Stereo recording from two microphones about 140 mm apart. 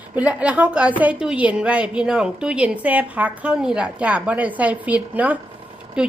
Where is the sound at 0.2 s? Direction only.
10° right (ahead or behind).